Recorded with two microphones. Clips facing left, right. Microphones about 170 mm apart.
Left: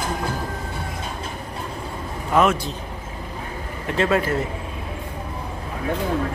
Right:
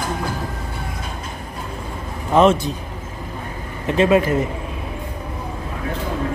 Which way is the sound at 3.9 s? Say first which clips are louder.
Right 5 dB; 20° right (ahead or behind).